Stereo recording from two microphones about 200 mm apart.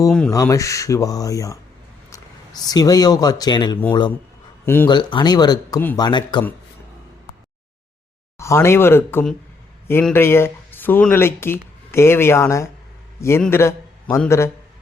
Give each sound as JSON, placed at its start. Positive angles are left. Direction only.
{"t": 0.3, "sound": "speech", "side_deg": 15}
{"t": 4.9, "sound": "speech", "side_deg": 20}
{"t": 8.4, "sound": "a man's voice", "side_deg": 15}